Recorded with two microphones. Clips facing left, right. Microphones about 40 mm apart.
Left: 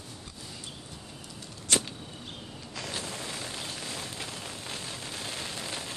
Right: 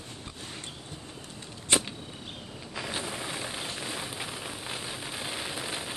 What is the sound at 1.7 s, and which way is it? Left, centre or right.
Arrow, right.